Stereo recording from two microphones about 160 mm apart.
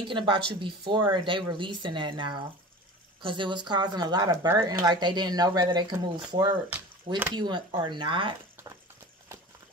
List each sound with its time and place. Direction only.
0.1 s speech: 30° right (ahead or behind)
8.6 s horse: 15° right (ahead or behind)